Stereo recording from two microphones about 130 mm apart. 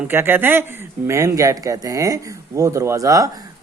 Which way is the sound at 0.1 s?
15° right (ahead or behind).